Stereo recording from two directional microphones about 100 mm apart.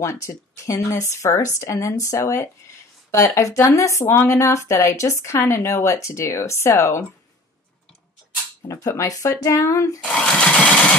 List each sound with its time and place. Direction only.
0.0 s a woman's voice: 30° left (ahead or behind)
8.6 s a woman's voice: 30° left (ahead or behind)
10.0 s engine starting: 15° left (ahead or behind)